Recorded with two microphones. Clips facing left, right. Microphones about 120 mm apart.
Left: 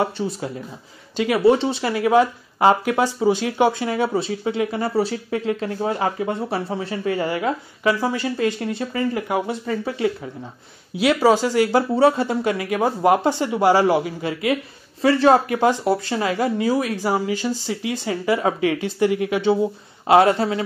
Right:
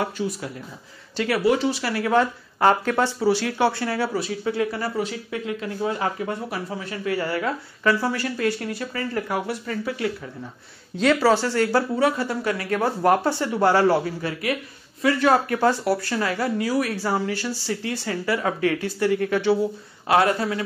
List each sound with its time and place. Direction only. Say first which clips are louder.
0.0 s speech: left 3 dB; 25° left (ahead or behind)
11.0 s speech: left 2 dB; 10° left (ahead or behind)
11.9 s speech: left 5 dB; 25° left (ahead or behind)